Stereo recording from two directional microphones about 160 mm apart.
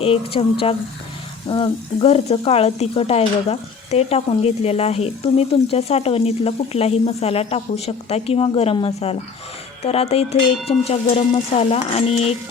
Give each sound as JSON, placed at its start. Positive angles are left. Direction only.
{"t": 0.0, "sound": "speech", "side_deg": 35}
{"t": 1.5, "sound": "speech", "side_deg": 35}